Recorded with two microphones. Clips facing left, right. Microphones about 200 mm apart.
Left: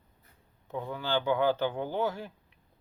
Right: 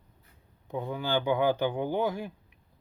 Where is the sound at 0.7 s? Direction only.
15° right (ahead or behind).